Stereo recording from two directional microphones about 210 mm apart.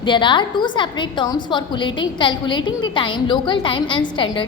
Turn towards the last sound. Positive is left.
turn(degrees=25)  # may be behind; listen again after turning